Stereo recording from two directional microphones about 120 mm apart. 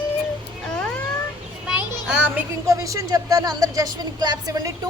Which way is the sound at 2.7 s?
25° right (ahead or behind).